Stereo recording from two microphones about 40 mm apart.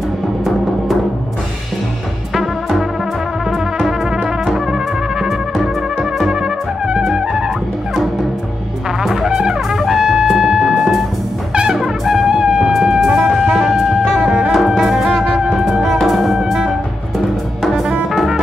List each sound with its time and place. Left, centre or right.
4.5 s trumpet: centre
6.3 s trumpet: right
7.2 s music: centre
9.0 s music: centre
9.4 s trumpet: centre
10.4 s music: centre
11.5 s brass instrument: centre
11.8 s music: centre
12.4 s music: centre
14.5 s music: centre
15.8 s music: centre